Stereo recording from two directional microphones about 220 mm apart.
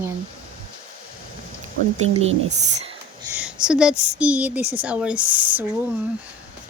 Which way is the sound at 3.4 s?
5° right (ahead or behind).